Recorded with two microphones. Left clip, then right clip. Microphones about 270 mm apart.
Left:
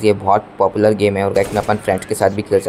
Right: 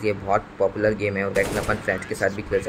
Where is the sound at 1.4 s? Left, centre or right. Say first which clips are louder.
Left 7 dB; centre.